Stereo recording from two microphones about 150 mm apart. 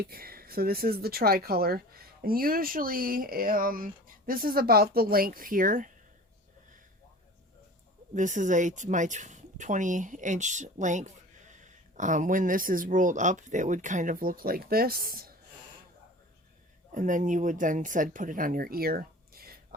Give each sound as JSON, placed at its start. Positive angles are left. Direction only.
{"t": 0.0, "sound": "speech", "side_deg": -90}
{"t": 8.1, "sound": "a woman's voice", "side_deg": -55}
{"t": 16.9, "sound": "a woman's voice", "side_deg": -60}